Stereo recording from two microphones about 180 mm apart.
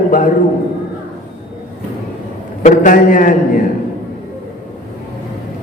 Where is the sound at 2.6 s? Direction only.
45° left (ahead or behind).